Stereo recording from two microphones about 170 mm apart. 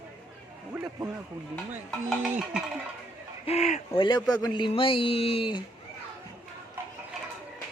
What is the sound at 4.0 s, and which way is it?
A man's voice, 30° left (ahead or behind).